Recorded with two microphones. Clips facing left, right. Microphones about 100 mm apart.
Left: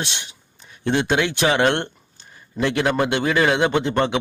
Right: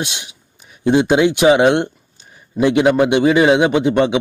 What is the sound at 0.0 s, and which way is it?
Speech, 15° right (ahead or behind).